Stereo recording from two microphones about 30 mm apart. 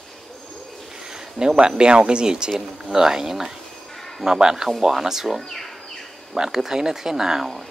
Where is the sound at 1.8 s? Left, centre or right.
Right.